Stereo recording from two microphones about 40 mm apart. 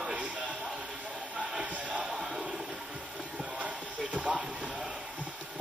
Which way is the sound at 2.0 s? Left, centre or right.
Centre.